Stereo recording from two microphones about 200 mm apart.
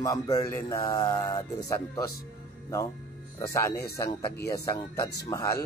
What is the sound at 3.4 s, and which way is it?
Speech, 15° left (ahead or behind).